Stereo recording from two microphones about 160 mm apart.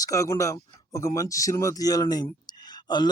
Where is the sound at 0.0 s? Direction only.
20° left (ahead or behind).